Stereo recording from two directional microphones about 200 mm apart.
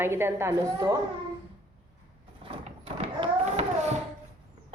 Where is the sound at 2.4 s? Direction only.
25° right (ahead or behind).